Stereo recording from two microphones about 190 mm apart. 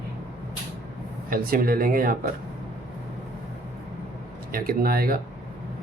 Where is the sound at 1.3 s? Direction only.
50° right (ahead or behind).